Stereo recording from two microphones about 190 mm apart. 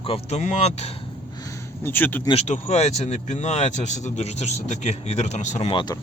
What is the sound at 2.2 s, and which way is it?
Speech, 35° left (ahead or behind).